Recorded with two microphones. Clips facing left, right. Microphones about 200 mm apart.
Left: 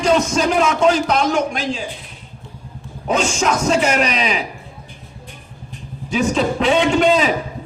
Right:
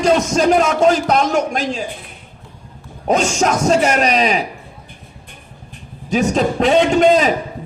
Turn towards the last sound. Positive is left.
turn(degrees=-40)  # may be behind; listen again after turning